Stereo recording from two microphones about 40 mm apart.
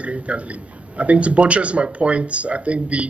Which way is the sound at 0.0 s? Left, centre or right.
Right.